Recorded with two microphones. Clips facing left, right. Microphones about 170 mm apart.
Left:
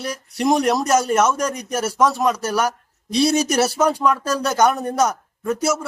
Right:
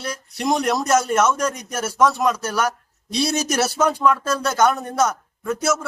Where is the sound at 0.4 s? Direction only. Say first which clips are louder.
Left 3 dB; 10° left (ahead or behind).